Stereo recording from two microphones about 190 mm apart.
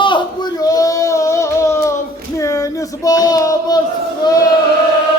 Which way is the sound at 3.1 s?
20° left (ahead or behind).